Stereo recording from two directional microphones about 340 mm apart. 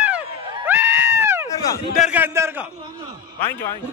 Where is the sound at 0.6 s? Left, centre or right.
Centre.